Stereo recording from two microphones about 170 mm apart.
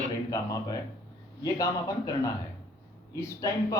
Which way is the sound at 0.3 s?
20° left (ahead or behind).